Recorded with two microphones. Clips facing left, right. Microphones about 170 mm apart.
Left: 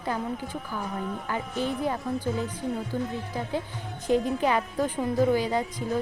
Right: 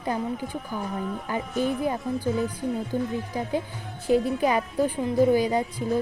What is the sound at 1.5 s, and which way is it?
Speech, 10° right (ahead or behind).